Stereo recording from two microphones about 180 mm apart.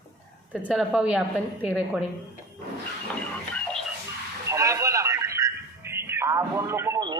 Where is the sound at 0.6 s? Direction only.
5° right (ahead or behind).